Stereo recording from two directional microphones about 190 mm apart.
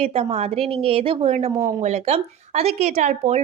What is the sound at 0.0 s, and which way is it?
A woman's voice, 30° right (ahead or behind).